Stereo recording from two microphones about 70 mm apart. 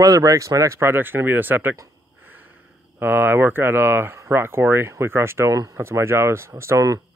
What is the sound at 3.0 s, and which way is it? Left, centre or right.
Speech, right.